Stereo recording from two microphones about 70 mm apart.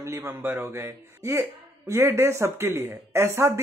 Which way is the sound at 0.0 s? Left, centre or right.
Right.